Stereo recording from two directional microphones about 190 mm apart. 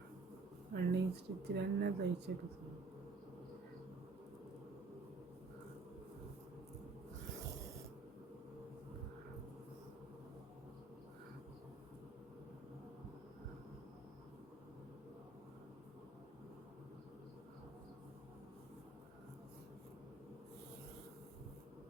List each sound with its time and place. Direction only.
0.7 s speech: 60° right (ahead or behind)